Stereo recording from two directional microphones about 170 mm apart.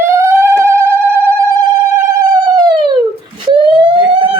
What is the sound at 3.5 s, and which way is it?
Police car, 30° right (ahead or behind).